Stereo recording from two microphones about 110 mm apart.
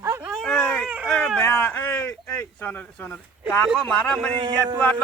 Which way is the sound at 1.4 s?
20° left (ahead or behind).